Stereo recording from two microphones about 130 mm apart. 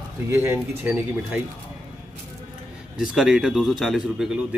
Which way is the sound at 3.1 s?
5° right (ahead or behind).